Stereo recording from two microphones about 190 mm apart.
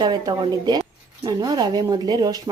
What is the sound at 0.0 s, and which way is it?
Speech, 20° right (ahead or behind).